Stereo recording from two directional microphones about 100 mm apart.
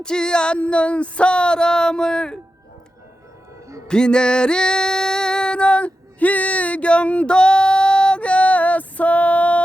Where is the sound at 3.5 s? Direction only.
30° right (ahead or behind).